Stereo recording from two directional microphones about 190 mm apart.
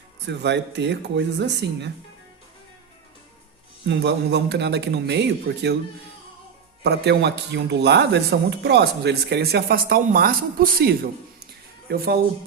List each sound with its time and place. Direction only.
0.3 s speech: 65° right (ahead or behind)
3.8 s speech: 65° right (ahead or behind)
6.8 s speech: 60° right (ahead or behind)